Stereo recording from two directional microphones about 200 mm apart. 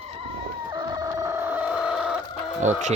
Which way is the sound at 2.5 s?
35° right (ahead or behind).